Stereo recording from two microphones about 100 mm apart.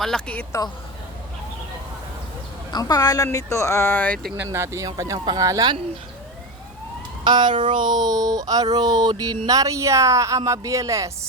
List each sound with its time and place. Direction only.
0.0 s a woman's voice: 5° left (ahead or behind)
2.7 s a woman's voice: 40° left (ahead or behind); by 4.2 s 15° left (ahead or behind)
4.4 s speech: 30° right (ahead or behind)
7.3 s speech: 50° right (ahead or behind); by 11.1 s 30° right (ahead or behind)